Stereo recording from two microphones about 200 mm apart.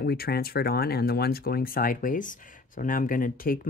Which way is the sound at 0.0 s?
50° left (ahead or behind).